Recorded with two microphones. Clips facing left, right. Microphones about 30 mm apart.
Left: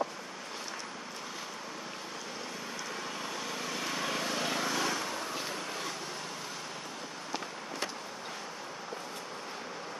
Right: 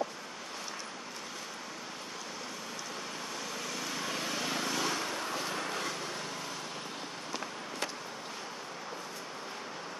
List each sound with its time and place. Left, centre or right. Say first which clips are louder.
3.6 s vehicle: left 3 dB; centre
4.4 s vehicle: even; centre
5.0 s vehicle: right 1 dB; centre
5.5 s vehicle: right 2 dB; centre